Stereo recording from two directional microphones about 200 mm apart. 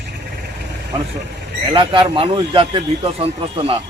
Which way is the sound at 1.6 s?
25° right (ahead or behind).